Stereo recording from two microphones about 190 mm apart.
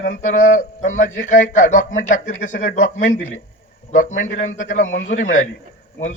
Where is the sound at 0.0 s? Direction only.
40° left (ahead or behind).